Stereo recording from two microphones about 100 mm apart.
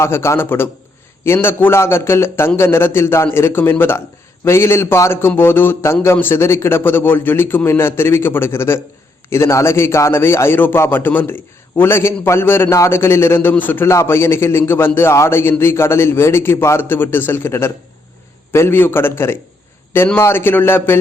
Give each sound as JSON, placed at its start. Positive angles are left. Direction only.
{"t": 0.0, "sound": "a man's voice", "side_deg": 25}